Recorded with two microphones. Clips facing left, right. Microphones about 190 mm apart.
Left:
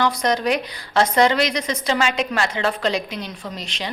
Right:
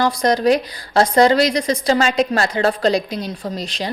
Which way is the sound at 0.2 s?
35° right (ahead or behind).